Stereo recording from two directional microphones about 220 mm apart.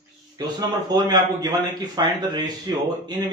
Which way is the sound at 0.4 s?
15° right (ahead or behind).